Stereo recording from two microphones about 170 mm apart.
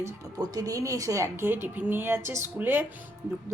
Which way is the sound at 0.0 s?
20° right (ahead or behind).